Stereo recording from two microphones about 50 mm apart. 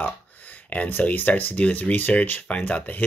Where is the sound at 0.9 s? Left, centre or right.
Left.